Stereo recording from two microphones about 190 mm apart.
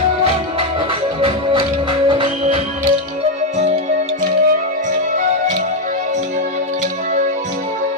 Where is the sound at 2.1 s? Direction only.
25° right (ahead or behind).